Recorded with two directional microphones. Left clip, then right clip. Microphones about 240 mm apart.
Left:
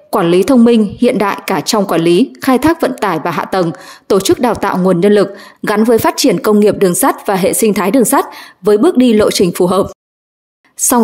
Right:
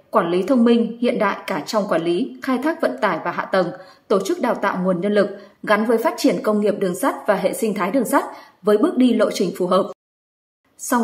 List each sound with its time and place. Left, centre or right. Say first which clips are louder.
0.1 s a woman's voice: left 8 dB; left